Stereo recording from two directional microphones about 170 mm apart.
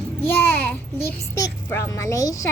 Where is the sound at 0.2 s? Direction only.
15° left (ahead or behind).